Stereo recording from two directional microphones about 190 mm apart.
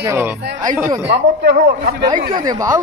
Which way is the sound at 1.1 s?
55° right (ahead or behind).